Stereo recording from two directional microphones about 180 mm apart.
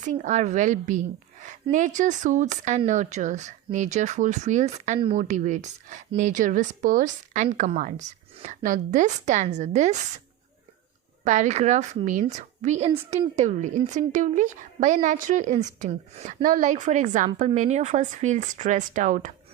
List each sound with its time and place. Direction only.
0.0 s a woman's voice: 45° right (ahead or behind)
11.2 s a woman's voice: 45° right (ahead or behind)